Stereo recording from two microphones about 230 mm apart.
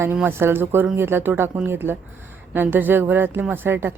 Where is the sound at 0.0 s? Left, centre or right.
Centre.